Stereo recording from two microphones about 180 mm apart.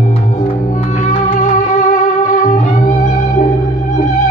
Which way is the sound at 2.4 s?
45° left (ahead or behind).